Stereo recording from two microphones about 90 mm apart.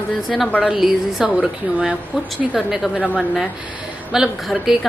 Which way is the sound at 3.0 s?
15° left (ahead or behind).